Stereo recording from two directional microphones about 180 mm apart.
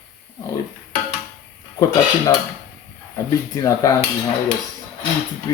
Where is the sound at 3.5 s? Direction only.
20° left (ahead or behind).